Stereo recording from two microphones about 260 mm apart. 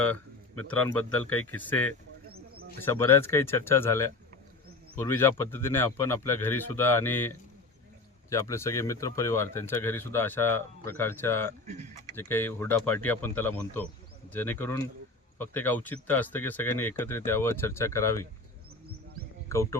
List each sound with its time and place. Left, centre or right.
0.0 s a sound: centre
0.7 s a man's voice: centre
2.3 s bird: right
2.8 s speech: centre
11.6 s speech: right
12.1 s speech: centre
19.5 s speech: centre